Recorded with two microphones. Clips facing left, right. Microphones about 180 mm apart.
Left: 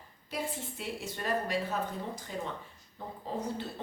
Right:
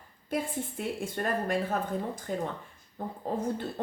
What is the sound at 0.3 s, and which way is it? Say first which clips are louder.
Speech: right 5 dB; 50° right (ahead or behind).